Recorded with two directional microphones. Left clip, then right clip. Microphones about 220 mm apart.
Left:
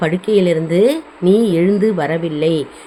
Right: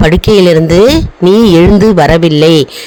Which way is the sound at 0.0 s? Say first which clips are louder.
Right 9 dB; 50° right (ahead or behind).